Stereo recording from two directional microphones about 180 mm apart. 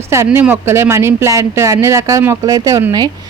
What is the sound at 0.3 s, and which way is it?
Speech, 10° right (ahead or behind).